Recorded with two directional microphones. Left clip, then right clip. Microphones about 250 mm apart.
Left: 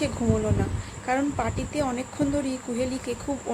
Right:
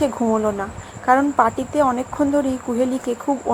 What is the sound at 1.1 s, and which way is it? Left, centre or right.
Speech, centre.